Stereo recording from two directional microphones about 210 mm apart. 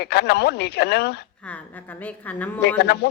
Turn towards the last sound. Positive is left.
turn(degrees=50)  # may be behind; listen again after turning